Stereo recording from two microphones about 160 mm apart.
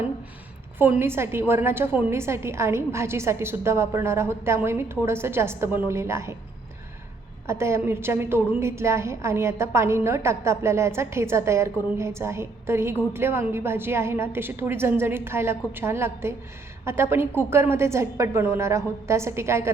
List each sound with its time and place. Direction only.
0.8 s a woman's voice: 15° right (ahead or behind)
7.4 s a woman's voice: 15° right (ahead or behind)